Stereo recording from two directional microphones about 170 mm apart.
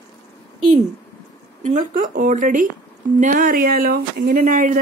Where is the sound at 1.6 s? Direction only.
50° right (ahead or behind).